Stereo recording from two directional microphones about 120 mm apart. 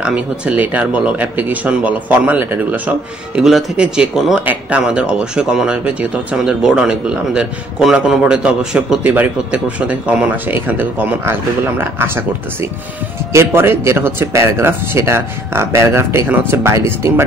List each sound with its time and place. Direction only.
0.0 s speech: 10° right (ahead or behind)
13.3 s speech: 20° right (ahead or behind)